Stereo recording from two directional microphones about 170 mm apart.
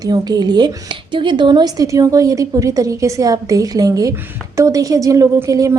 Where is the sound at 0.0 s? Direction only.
25° right (ahead or behind).